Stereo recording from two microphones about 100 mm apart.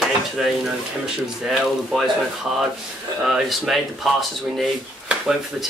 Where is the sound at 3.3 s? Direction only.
Centre (ahead or behind).